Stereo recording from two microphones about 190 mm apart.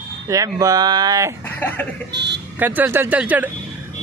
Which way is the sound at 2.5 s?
10° right (ahead or behind).